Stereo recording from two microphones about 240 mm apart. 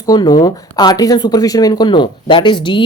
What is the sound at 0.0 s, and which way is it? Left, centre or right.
Speech, centre.